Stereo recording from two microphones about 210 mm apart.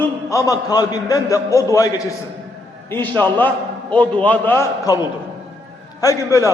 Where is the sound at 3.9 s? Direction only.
5° left (ahead or behind).